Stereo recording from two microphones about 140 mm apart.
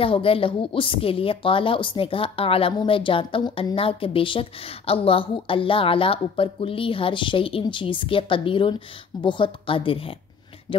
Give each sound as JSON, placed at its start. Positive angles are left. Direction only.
{"t": 0.0, "sound": "a woman's voice", "side_deg": 40}